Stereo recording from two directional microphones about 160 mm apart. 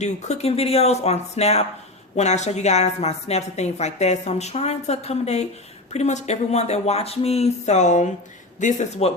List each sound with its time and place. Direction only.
0.0 s a woman's voice: 45° left (ahead or behind)